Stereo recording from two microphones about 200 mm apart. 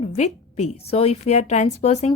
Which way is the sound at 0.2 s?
35° left (ahead or behind).